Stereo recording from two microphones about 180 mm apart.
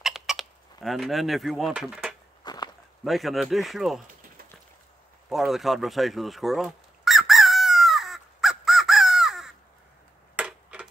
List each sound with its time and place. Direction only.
0.0 s fowl: centre (ahead or behind)
2.4 s walk: 20° left (ahead or behind)
3.0 s a man's voice: centre (ahead or behind)
5.3 s fowl: centre (ahead or behind)
10.3 s tick-tock: 5° right (ahead or behind)